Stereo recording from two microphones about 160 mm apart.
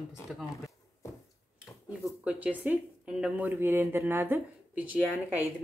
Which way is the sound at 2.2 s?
10° right (ahead or behind).